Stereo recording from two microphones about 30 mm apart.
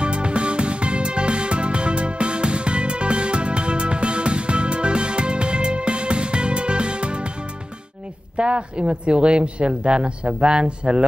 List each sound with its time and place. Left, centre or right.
0.0 s music: right
8.4 s speech: right